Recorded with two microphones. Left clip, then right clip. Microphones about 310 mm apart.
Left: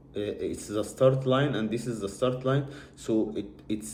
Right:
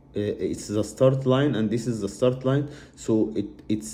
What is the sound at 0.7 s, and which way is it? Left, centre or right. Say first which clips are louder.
Speech: right 2 dB; right.